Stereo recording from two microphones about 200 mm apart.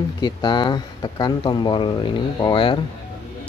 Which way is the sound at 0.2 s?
20° left (ahead or behind).